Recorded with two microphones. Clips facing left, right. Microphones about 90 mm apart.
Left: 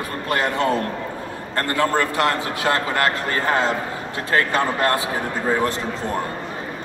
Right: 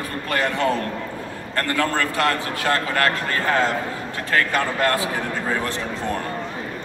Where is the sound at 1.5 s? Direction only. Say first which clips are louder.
Left 2 dB; 30° left (ahead or behind).